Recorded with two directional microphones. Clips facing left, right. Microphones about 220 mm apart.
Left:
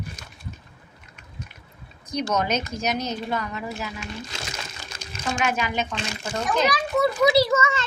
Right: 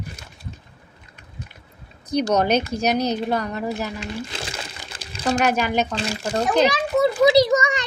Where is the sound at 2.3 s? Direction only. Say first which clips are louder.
Right 5 dB; 35° right (ahead or behind).